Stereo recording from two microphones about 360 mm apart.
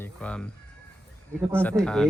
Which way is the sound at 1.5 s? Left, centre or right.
Centre.